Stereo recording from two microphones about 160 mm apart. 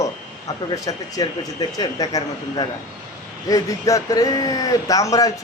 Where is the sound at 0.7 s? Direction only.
20° left (ahead or behind).